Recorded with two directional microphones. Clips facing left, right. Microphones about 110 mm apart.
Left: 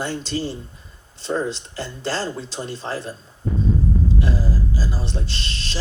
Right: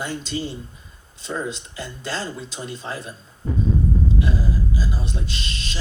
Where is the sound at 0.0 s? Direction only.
30° left (ahead or behind).